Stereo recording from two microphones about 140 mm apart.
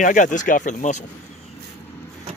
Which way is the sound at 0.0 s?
65° left (ahead or behind).